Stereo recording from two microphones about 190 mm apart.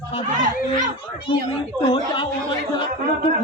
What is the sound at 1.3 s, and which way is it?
Speech, 25° left (ahead or behind).